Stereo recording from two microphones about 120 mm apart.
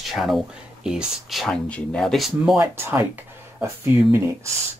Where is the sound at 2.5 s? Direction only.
20° right (ahead or behind).